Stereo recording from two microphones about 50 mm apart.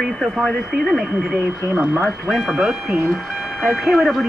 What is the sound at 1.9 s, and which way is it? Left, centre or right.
Speech, left.